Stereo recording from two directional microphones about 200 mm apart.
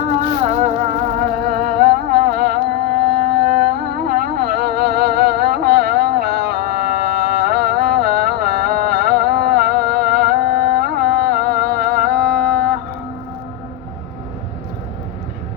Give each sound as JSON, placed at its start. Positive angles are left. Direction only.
{"t": 0.0, "sound": "music", "side_deg": -35}
{"t": 1.2, "sound": "music", "side_deg": -50}